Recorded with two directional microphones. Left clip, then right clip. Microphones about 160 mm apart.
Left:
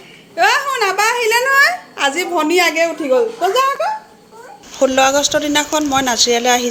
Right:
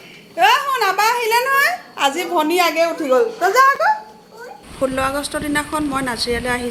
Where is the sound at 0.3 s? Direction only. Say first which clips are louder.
Left 1 dB; 15° left (ahead or behind).